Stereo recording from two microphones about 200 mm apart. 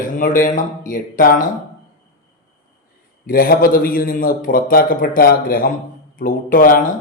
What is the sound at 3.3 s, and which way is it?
Speech, 45° left (ahead or behind).